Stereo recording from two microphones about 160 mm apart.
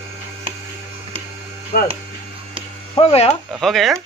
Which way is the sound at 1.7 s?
65° left (ahead or behind).